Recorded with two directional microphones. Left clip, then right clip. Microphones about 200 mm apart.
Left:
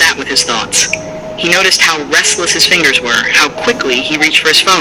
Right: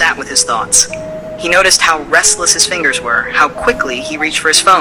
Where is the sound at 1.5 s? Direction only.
50° right (ahead or behind).